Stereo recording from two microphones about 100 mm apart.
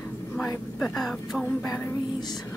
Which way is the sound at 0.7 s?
5° left (ahead or behind).